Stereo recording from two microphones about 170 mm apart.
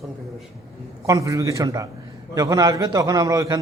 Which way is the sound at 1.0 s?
20° right (ahead or behind).